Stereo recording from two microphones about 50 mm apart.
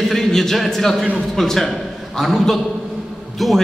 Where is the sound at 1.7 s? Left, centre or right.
Centre.